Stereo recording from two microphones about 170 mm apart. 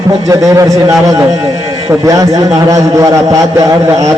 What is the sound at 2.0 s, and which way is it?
A man's voice, 20° right (ahead or behind).